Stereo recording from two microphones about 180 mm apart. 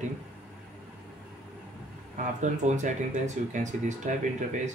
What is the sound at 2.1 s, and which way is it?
Speech, 45° right (ahead or behind).